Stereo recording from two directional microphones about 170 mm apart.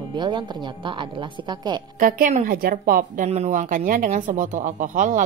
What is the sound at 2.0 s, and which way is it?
A woman's voice, 55° right (ahead or behind).